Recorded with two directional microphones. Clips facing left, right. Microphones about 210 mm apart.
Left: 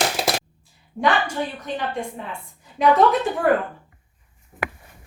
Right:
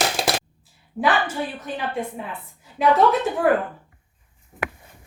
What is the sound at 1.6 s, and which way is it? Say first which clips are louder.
Speech: even; 5° right (ahead or behind).